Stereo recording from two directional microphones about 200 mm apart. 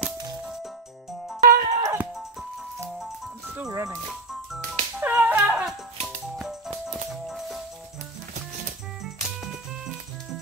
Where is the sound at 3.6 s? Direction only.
15° right (ahead or behind).